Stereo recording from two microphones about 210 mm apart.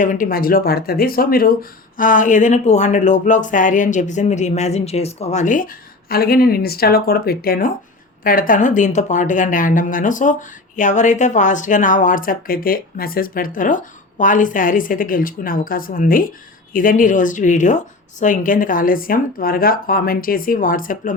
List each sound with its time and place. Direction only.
0.0 s speech: 40° left (ahead or behind)